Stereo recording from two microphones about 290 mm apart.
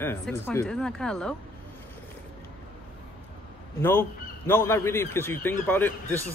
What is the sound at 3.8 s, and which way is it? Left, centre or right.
A man's voice, centre.